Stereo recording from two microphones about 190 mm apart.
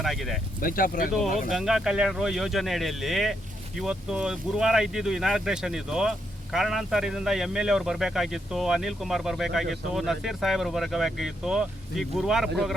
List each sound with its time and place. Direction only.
0.0 s speech: centre (ahead or behind)
0.6 s speech: 50° left (ahead or behind)
1.5 s speech: centre (ahead or behind)